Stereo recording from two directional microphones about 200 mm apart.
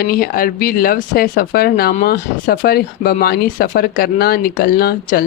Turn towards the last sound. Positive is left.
turn(degrees=50)  # may be behind; listen again after turning